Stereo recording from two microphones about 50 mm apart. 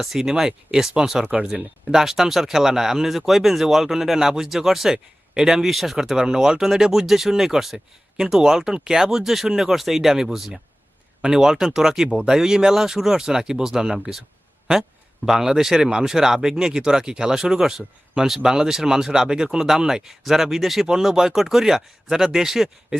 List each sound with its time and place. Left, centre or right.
0.0 s speech: centre
12.0 s speech: centre
15.3 s speech: centre